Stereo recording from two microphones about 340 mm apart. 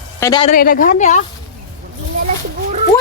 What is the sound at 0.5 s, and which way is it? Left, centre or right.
Speech, left.